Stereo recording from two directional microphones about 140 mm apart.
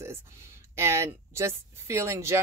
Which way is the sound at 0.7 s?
20° right (ahead or behind).